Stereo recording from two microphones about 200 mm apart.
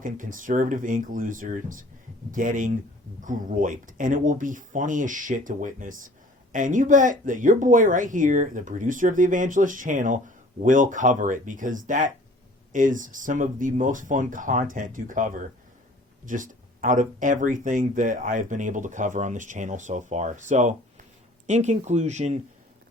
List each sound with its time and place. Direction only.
0.0 s speech: 40° right (ahead or behind)